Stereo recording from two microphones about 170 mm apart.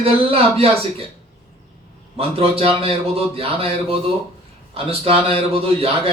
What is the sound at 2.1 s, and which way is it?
A man's voice, 35° right (ahead or behind).